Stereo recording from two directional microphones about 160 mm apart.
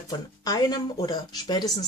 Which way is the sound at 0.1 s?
25° left (ahead or behind).